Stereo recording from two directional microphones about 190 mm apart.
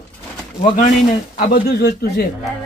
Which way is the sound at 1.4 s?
55° left (ahead or behind).